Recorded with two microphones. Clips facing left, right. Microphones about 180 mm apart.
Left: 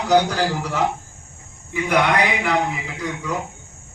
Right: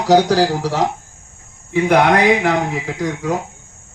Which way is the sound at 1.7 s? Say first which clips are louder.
Right 6 dB; 65° right (ahead or behind).